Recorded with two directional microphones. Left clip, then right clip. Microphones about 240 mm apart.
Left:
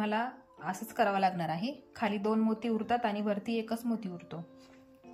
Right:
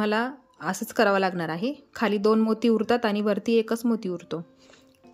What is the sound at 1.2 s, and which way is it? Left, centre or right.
A woman's voice, centre.